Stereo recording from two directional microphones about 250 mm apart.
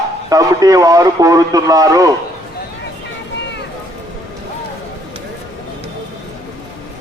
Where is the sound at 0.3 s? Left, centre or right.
Centre.